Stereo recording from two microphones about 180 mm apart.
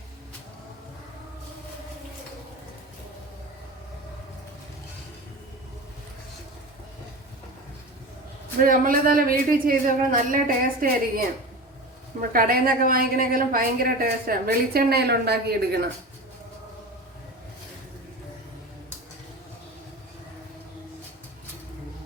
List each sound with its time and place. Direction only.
8.6 s speech: 50° right (ahead or behind)
12.3 s a woman's voice: 55° right (ahead or behind)